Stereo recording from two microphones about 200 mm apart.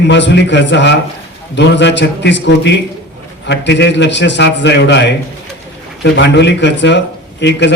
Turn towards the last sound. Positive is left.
turn(degrees=60)  # may be behind; listen again after turning